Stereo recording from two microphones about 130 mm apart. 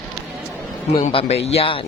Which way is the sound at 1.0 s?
45° left (ahead or behind).